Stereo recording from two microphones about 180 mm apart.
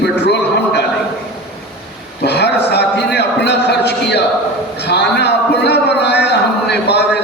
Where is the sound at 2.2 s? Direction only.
70° left (ahead or behind).